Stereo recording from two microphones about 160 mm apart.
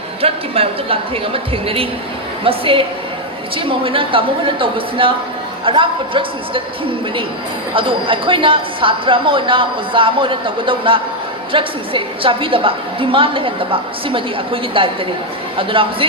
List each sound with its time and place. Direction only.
0.2 s speech: 35° right (ahead or behind)
7.7 s speech: 30° right (ahead or behind)